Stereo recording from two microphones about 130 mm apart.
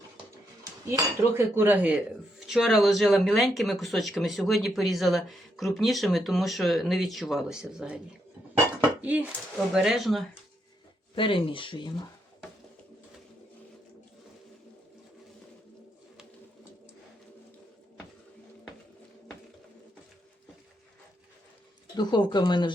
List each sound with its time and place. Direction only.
0.9 s cutlery: 20° right (ahead or behind)
2.5 s speech: centre (ahead or behind)
9.0 s dishes: 10° right (ahead or behind)
9.6 s speech: centre (ahead or behind)
11.1 s speech: 40° left (ahead or behind)
21.9 s speech: 35° left (ahead or behind)